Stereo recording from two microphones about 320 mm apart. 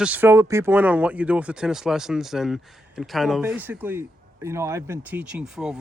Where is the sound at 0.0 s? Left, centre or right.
Centre.